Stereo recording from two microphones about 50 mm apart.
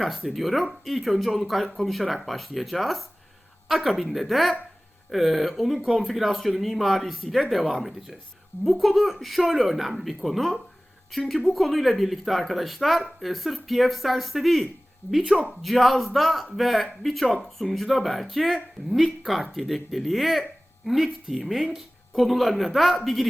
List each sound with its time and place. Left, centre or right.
0.3 s speech: centre
15.2 s speech: centre
15.6 s speech: centre